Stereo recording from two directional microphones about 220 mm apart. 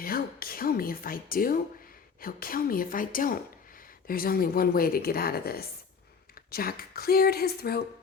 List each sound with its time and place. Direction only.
0.0 s speech: 40° left (ahead or behind)